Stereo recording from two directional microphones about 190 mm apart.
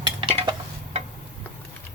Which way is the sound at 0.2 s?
25° right (ahead or behind).